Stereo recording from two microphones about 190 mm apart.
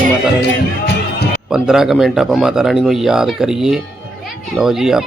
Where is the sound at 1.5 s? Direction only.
5° right (ahead or behind).